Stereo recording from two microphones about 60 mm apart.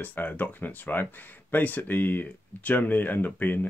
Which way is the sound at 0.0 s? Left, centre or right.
Left.